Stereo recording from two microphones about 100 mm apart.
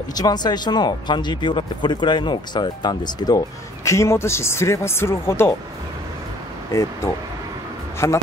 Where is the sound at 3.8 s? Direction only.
30° left (ahead or behind).